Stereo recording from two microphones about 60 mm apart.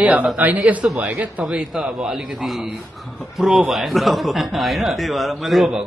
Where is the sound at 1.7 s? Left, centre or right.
Centre.